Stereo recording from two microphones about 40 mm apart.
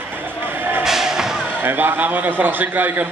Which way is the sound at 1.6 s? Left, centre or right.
Right.